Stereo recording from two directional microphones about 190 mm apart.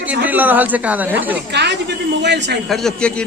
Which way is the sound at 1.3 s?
65° right (ahead or behind).